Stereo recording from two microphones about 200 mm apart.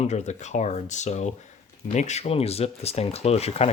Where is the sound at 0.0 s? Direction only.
35° left (ahead or behind).